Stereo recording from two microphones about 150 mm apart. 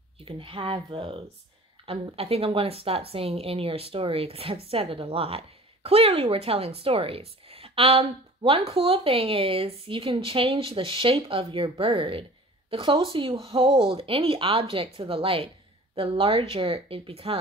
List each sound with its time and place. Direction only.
0.2 s a woman's voice: 40° right (ahead or behind)